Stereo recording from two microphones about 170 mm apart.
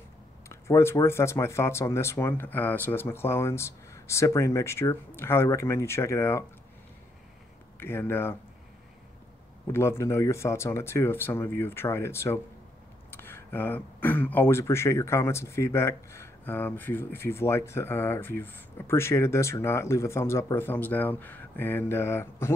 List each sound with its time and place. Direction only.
0.5 s speech: 15° left (ahead or behind)
7.7 s speech: 15° left (ahead or behind)
9.7 s speech: 15° left (ahead or behind)